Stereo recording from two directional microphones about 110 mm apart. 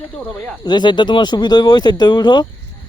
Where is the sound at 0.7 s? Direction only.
45° left (ahead or behind).